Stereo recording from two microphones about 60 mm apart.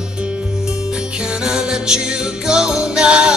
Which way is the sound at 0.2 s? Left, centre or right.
Centre.